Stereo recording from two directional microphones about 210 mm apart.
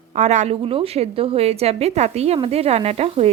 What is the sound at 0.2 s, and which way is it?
Speech, 35° right (ahead or behind).